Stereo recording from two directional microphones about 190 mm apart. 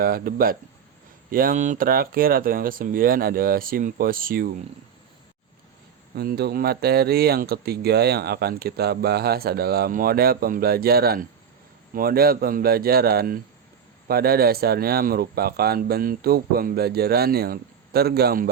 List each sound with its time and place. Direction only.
0.0 s speech: 50° right (ahead or behind)
6.1 s speech: 55° right (ahead or behind)